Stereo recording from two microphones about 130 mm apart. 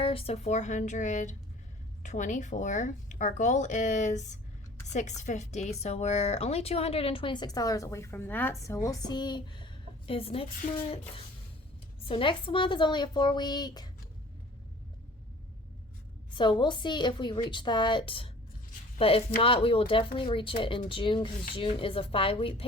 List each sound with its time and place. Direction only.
0.0 s speech: 45° left (ahead or behind)
10.1 s speech: 45° left (ahead or behind)
10.6 s speech: 80° left
12.0 s a woman's voice: 40° left (ahead or behind)
16.4 s a woman's voice: 40° left (ahead or behind)